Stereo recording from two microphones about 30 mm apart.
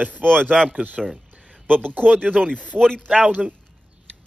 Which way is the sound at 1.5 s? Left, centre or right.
Left.